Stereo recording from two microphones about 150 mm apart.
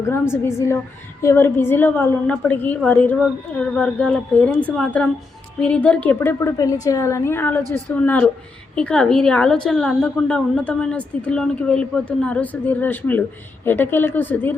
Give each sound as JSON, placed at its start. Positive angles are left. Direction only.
{"t": 0.0, "sound": "a woman's voice", "side_deg": 15}